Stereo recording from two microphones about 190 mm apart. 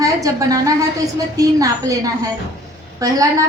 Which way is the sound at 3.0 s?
20° right (ahead or behind).